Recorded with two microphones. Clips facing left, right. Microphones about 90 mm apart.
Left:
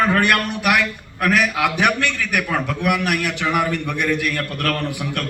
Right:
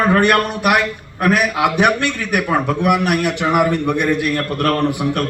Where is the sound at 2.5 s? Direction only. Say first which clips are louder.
Right 7 dB; 25° right (ahead or behind).